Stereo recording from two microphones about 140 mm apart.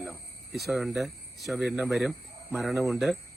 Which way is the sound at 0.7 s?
Centre (ahead or behind).